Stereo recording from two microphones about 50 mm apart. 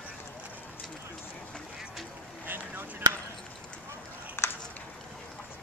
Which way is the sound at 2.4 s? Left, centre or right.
Right.